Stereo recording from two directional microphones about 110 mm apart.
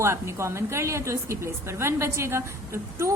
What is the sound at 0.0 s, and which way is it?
A woman's voice, 25° right (ahead or behind).